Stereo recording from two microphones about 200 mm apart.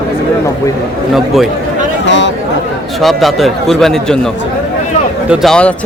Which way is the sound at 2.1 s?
65° left (ahead or behind).